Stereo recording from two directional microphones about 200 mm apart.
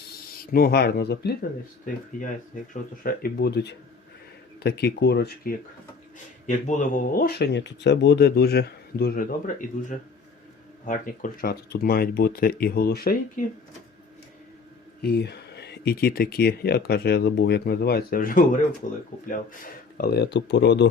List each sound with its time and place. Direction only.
0.5 s speech: 50° left (ahead or behind)
3.0 s speech: 45° left (ahead or behind)
6.7 s speech: 40° left (ahead or behind)
15.0 s speech: 55° left (ahead or behind); by 19.0 s 40° left (ahead or behind)
20.0 s speech: 55° left (ahead or behind)